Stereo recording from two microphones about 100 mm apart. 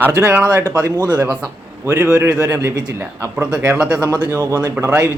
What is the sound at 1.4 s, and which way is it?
Speech, 20° right (ahead or behind).